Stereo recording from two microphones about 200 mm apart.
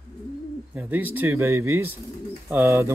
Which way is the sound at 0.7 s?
10° right (ahead or behind).